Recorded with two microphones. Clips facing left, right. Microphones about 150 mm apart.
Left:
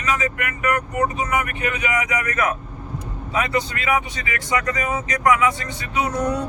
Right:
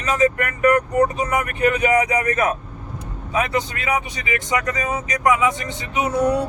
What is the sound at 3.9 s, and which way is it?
Speech, 20° right (ahead or behind).